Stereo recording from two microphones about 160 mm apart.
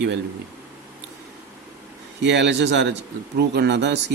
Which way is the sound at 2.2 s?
90° right.